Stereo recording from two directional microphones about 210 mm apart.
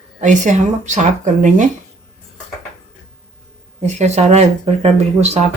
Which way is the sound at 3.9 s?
30° right (ahead or behind).